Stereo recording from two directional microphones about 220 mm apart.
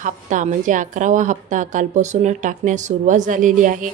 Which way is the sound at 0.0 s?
35° right (ahead or behind).